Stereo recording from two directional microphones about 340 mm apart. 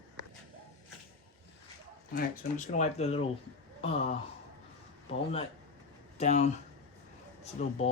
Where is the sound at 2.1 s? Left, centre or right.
Left.